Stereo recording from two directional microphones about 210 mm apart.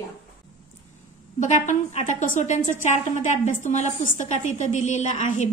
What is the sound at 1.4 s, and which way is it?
A woman's voice, 35° left (ahead or behind).